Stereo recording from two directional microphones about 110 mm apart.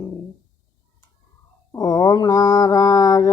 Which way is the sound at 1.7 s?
35° left (ahead or behind).